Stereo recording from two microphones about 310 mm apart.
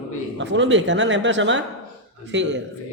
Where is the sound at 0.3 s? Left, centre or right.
Right.